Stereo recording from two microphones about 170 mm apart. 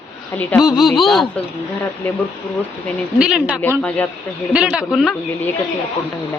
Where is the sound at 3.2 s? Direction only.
5° right (ahead or behind).